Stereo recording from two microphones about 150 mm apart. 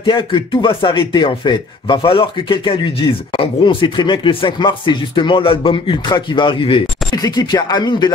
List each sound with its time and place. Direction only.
0.0 s speech: 35° left (ahead or behind)